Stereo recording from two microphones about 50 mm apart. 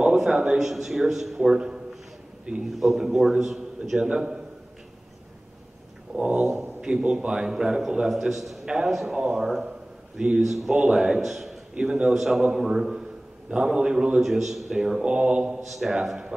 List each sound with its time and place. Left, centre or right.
0.0 s a sound: centre
0.6 s a man's voice: centre
6.1 s a sound: right
6.8 s a man's voice: centre
9.7 s a sound: centre
10.4 s a man's voice: centre
11.7 s a man's voice: centre
14.2 s a man's voice: centre
15.0 s a man's voice: right